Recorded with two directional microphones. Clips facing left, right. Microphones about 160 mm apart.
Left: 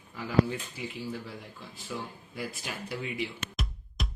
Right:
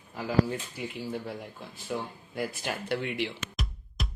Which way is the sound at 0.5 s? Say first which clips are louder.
Right 2 dB; 55° right (ahead or behind).